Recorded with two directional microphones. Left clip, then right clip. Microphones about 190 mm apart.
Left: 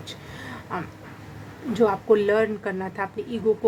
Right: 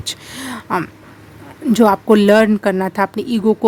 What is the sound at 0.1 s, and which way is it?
Speech, 60° right (ahead or behind).